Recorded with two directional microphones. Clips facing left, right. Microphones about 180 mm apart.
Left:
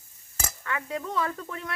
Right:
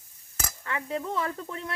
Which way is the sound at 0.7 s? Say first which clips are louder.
Right 1 dB; 25° right (ahead or behind).